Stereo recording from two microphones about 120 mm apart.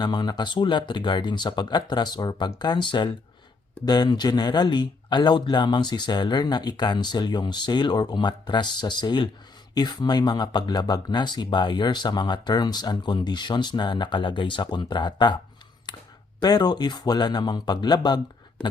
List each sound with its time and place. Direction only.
0.0 s speech: 35° left (ahead or behind)
16.4 s speech: 35° left (ahead or behind)